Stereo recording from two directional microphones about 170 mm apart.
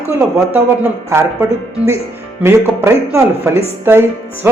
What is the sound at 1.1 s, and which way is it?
A woman's voice, 15° right (ahead or behind).